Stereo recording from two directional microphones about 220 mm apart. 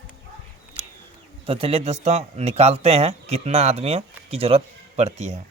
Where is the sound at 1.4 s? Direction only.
25° right (ahead or behind).